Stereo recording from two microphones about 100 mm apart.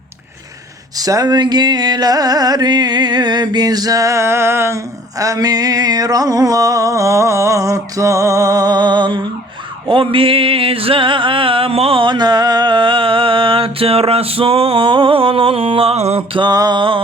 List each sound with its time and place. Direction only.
0.9 s carnatic music: 35° right (ahead or behind)
9.9 s music: 60° right (ahead or behind); by 16.4 s 85° right
16.4 s a sound: 40° right (ahead or behind)